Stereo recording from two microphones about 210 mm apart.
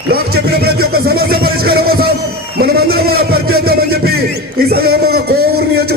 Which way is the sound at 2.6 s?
45° right (ahead or behind).